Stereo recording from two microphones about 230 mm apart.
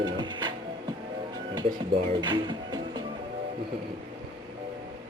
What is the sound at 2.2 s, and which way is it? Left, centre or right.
Speech, centre.